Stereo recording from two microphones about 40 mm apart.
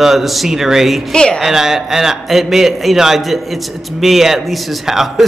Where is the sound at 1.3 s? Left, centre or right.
Centre.